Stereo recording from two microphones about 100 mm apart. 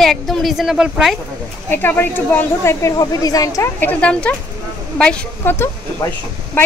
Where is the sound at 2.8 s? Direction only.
35° left (ahead or behind).